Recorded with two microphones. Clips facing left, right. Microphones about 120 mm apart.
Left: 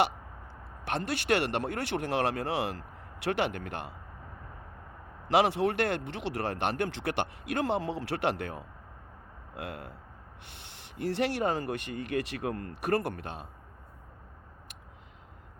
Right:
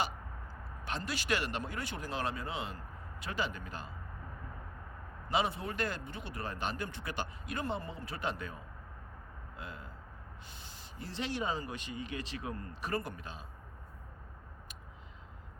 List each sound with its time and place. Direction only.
0.9 s speech: 60° left (ahead or behind)
5.3 s speech: 80° left; by 13.5 s 65° left (ahead or behind)